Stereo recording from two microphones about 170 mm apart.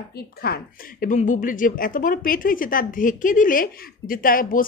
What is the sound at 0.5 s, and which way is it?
Speech, 65° left (ahead or behind).